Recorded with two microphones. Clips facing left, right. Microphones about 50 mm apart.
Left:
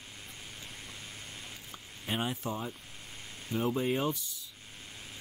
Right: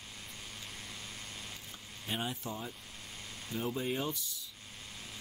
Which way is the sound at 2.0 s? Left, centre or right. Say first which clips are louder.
Left 4 dB; left.